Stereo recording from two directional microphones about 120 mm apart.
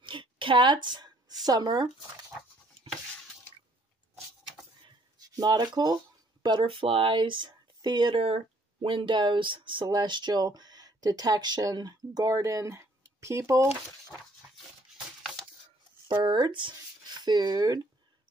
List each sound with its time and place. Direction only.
0.0 s a sound: 45° right (ahead or behind)
1.4 s speech: 35° right (ahead or behind)
4.8 s writing: 35° right (ahead or behind)
6.4 s speech: 40° right (ahead or behind); by 13.7 s 25° right (ahead or behind)
16.1 s speech: 40° right (ahead or behind)